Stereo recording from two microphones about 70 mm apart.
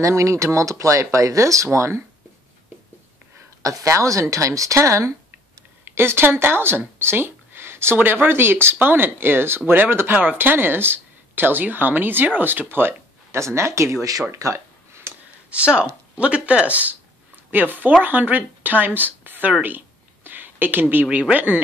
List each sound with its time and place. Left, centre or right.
0.0 s speech: right
3.6 s speech: right
5.9 s speech: right
15.1 s a sound: right
15.5 s speech: centre
18.9 s a sound: right
20.2 s speech: right